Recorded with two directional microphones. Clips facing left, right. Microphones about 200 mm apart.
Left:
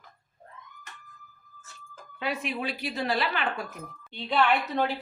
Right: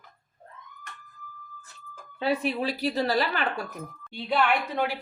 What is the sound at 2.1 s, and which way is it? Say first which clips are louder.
Speech: right 5 dB; 35° right (ahead or behind).